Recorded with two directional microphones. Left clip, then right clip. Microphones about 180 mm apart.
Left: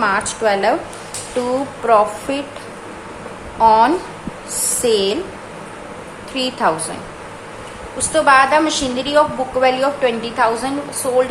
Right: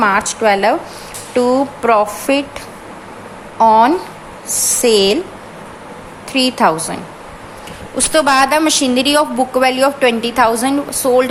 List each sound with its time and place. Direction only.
0.0 s speech: 30° right (ahead or behind)
3.6 s speech: 30° right (ahead or behind)
6.3 s speech: 35° right (ahead or behind)
7.9 s a woman's voice: 45° right (ahead or behind)